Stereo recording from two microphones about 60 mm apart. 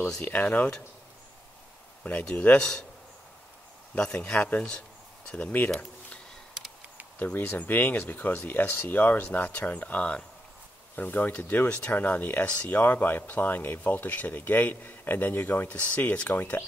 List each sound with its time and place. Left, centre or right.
0.2 s speech: left
2.2 s speech: left
3.9 s a man's voice: centre
7.5 s speech: left